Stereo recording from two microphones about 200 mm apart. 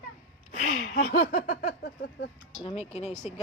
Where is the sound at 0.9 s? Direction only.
45° left (ahead or behind).